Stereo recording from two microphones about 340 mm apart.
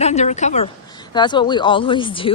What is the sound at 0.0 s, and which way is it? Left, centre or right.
Speech, centre.